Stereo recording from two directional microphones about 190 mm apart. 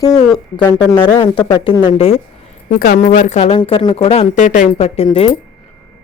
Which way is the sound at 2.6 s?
45° left (ahead or behind).